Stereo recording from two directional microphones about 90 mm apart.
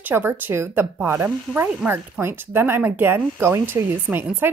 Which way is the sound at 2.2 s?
25° right (ahead or behind).